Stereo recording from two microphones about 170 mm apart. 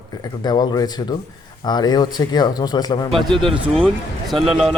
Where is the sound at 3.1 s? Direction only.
Centre (ahead or behind).